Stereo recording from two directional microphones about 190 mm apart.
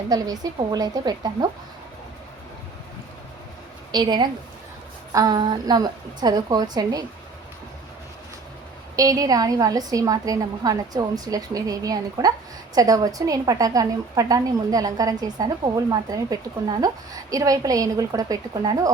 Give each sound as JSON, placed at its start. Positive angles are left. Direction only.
{"t": 0.1, "sound": "a woman's voice", "side_deg": -20}
{"t": 3.9, "sound": "a woman's voice", "side_deg": -25}
{"t": 9.0, "sound": "a woman's voice", "side_deg": -20}